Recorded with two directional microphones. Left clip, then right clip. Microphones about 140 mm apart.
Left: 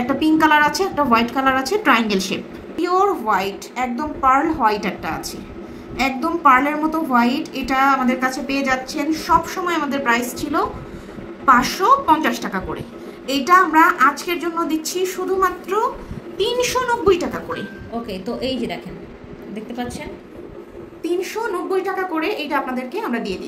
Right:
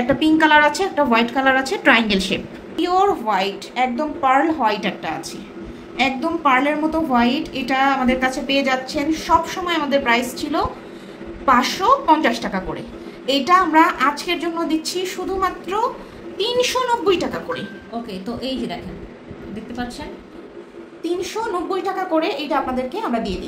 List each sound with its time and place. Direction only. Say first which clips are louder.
0.2 s a woman's voice: even; 30° right (ahead or behind)
18.1 s a woman's voice: left 3 dB; 10° left (ahead or behind)
21.0 s a woman's voice: left 1 dB; 15° right (ahead or behind)